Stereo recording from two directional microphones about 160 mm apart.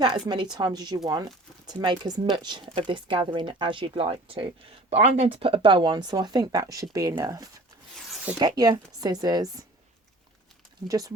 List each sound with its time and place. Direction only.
0.0 s speech: 25° right (ahead or behind)
10.8 s speech: 20° right (ahead or behind)